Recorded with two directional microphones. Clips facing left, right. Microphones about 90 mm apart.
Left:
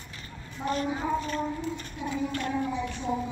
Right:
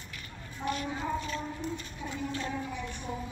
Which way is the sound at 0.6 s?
35° left (ahead or behind).